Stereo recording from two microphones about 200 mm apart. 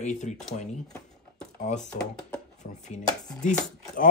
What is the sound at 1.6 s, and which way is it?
Speech, 35° left (ahead or behind).